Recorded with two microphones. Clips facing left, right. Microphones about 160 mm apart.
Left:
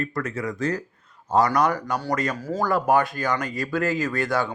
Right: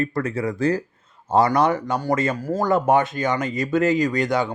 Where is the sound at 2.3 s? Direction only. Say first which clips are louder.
Right 3 dB; 10° right (ahead or behind).